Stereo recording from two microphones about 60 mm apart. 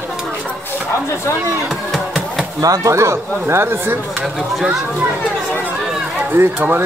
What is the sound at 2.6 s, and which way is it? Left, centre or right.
Speech, right.